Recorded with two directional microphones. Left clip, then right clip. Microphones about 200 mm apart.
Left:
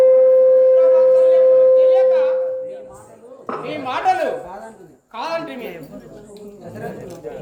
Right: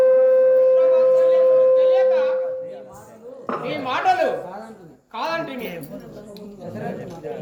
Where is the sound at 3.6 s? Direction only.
5° left (ahead or behind).